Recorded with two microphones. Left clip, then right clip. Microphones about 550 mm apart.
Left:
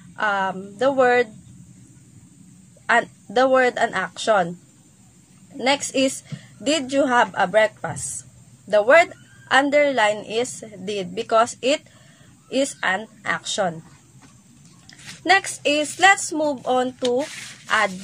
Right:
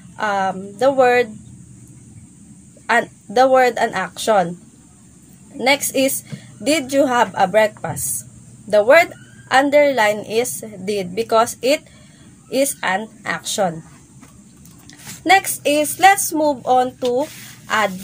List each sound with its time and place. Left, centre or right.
0.1 s a woman's voice: left
2.9 s a woman's voice: left
5.6 s a woman's voice: left
14.9 s a woman's voice: left